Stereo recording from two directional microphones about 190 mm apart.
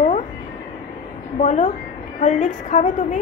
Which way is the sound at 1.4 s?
40° left (ahead or behind).